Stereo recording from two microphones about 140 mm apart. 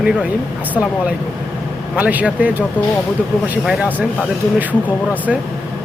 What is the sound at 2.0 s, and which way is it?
Speech, 10° right (ahead or behind).